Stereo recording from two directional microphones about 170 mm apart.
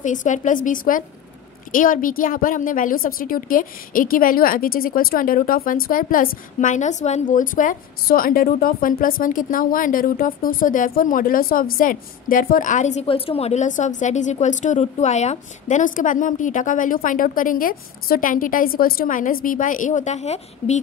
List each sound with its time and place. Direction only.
0.0 s a woman's voice: 45° left (ahead or behind)